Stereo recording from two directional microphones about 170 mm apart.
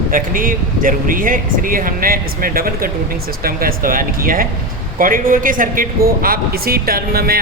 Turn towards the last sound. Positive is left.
turn(degrees=-60)  # may be behind; listen again after turning